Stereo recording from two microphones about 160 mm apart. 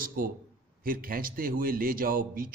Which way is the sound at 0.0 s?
60° right (ahead or behind).